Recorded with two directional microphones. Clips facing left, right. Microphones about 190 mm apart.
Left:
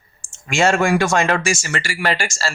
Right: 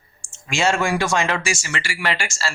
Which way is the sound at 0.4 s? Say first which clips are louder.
Left 4 dB; 50° left (ahead or behind).